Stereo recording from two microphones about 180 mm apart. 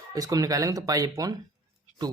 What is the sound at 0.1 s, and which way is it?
Speech, 20° right (ahead or behind).